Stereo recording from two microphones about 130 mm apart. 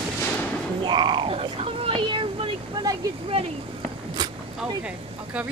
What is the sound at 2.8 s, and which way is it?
Speech, 35° right (ahead or behind).